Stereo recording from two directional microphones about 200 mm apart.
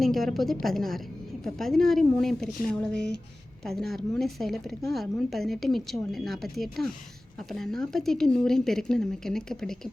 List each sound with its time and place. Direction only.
0.0 s a woman's voice: centre (ahead or behind)